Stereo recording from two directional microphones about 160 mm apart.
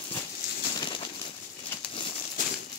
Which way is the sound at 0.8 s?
30° left (ahead or behind).